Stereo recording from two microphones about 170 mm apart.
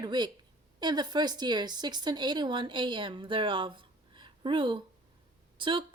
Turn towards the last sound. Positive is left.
turn(degrees=-30)  # may be behind; listen again after turning